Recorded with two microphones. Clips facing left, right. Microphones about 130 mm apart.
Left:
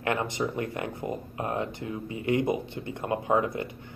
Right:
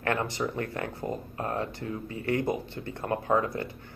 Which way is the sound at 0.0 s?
15° left (ahead or behind).